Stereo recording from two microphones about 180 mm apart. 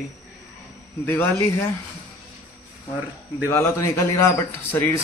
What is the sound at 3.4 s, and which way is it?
A man's voice, 15° left (ahead or behind).